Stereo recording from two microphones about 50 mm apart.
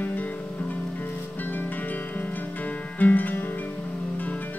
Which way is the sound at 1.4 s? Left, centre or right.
Left.